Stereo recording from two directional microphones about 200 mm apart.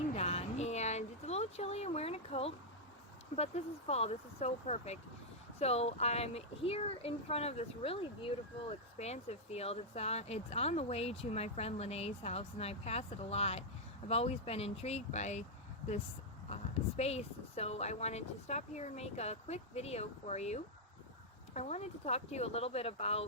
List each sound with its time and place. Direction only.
0.1 s a sound: 30° left (ahead or behind)
3.3 s speech: 30° left (ahead or behind)
17.0 s speech: 30° left (ahead or behind)